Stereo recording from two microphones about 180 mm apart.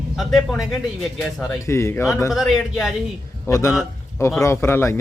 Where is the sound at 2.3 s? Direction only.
Centre (ahead or behind).